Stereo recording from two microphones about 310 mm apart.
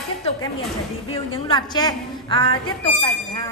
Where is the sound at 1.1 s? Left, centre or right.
Centre.